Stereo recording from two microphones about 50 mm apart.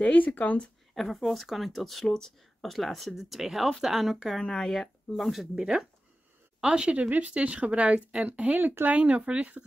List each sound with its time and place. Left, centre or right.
0.0 s speech: left
0.9 s a woman's voice: centre
4.4 s speech: centre
5.6 s a woman's voice: centre